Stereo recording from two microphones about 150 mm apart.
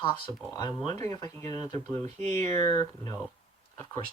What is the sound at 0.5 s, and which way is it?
Speech, 25° left (ahead or behind).